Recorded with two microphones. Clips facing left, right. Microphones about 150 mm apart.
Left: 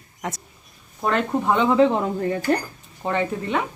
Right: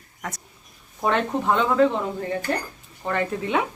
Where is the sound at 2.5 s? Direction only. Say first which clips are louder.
Left 6 dB; 45° left (ahead or behind).